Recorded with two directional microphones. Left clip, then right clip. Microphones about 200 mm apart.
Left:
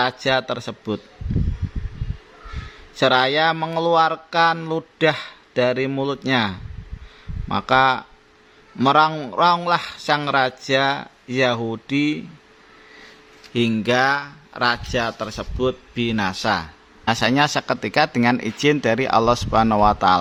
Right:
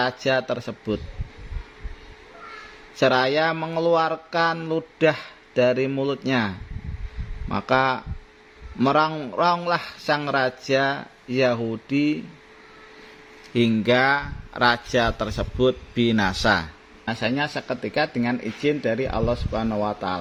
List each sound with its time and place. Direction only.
0.0 s a man's voice: 5° left (ahead or behind)
2.9 s a man's voice: 5° left (ahead or behind)
13.5 s speech: 5° left (ahead or behind)
17.1 s speech: 20° left (ahead or behind)